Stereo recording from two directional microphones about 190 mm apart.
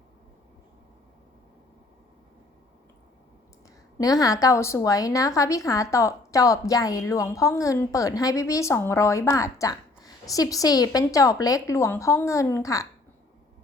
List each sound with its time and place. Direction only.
3.9 s a woman's voice: 20° left (ahead or behind)